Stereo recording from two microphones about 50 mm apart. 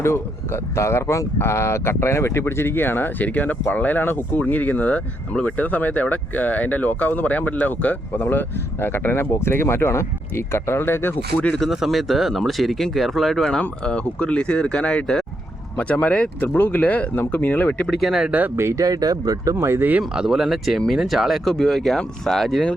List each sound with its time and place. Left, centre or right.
0.0 s speech: left
3.2 s speech: left
11.3 s speech: left
11.7 s speech: centre
13.4 s speech: centre
15.8 s speech: left
18.3 s speech: right
18.5 s speech: right
20.0 s speech: centre
21.5 s speech: centre